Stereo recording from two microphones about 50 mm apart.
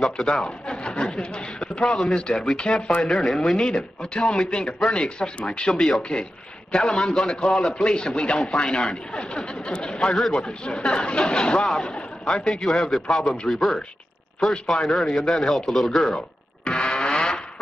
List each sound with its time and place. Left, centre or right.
0.0 s a man's voice: centre
16.6 s music: centre